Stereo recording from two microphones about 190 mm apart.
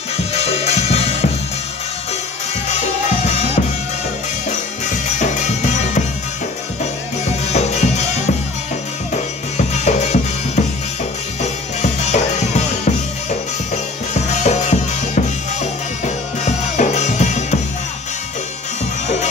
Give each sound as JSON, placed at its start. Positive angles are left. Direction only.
{"t": 0.3, "sound": "music", "side_deg": 35}
{"t": 2.7, "sound": "drum", "side_deg": 35}
{"t": 5.2, "sound": "music", "side_deg": 40}
{"t": 7.5, "sound": "music", "side_deg": 35}
{"t": 9.8, "sound": "music", "side_deg": 35}
{"t": 11.4, "sound": "drum", "side_deg": 35}
{"t": 14.1, "sound": "music", "side_deg": 35}
{"t": 16.4, "sound": "music", "side_deg": 40}